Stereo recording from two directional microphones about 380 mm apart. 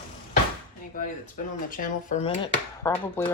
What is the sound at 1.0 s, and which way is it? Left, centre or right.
Speech, left.